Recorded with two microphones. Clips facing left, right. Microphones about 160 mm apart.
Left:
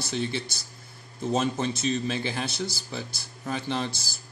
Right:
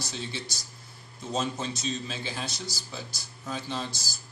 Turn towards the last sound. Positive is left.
turn(degrees=60)  # may be behind; listen again after turning